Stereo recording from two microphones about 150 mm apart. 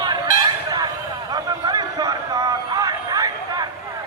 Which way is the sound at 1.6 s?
25° right (ahead or behind).